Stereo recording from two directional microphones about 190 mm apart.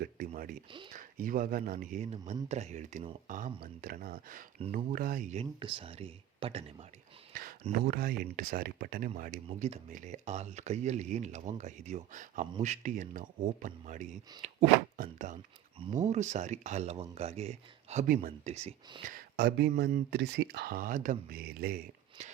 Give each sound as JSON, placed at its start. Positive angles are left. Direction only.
{"t": 0.3, "sound": "a sound", "side_deg": -50}
{"t": 0.9, "sound": "speech", "side_deg": -45}
{"t": 3.2, "sound": "speech", "side_deg": -45}
{"t": 5.5, "sound": "speech", "side_deg": -25}
{"t": 7.3, "sound": "speech", "side_deg": -45}
{"t": 19.0, "sound": "speech", "side_deg": -50}